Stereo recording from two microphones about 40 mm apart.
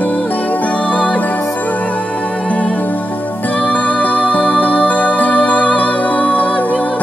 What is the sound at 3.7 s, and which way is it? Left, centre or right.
Music, left.